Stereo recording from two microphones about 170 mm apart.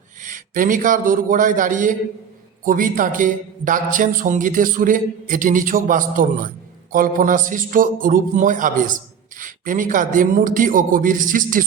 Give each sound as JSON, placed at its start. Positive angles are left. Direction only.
{"t": 0.2, "sound": "a man's voice", "side_deg": -50}